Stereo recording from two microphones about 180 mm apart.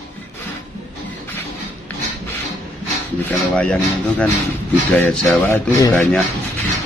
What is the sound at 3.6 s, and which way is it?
Speech, 5° left (ahead or behind).